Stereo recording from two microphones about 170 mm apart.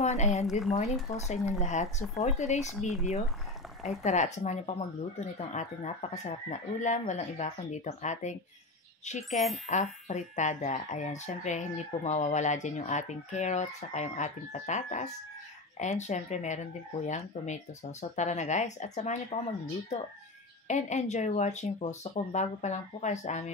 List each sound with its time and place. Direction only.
0.0 s speech: 40° left (ahead or behind)
0.5 s speech: centre (ahead or behind)
0.7 s speech: 40° left (ahead or behind)
2.8 s speech: centre (ahead or behind)
3.8 s speech: 40° left (ahead or behind)
9.3 s speech: centre (ahead or behind)
9.7 s speech: 45° left (ahead or behind)
20.6 s speech: 45° left (ahead or behind)